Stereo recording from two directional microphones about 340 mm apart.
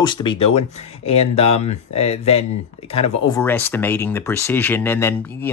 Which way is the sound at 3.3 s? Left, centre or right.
Centre.